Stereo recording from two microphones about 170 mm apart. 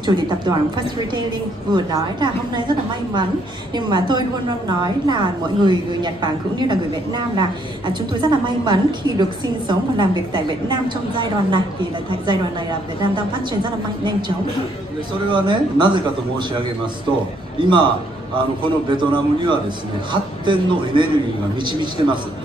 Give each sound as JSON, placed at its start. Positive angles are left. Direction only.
{"t": 0.0, "sound": "a woman's voice", "side_deg": -25}
{"t": 13.0, "sound": "a woman's voice", "side_deg": -25}
{"t": 15.2, "sound": "a woman's voice", "side_deg": -30}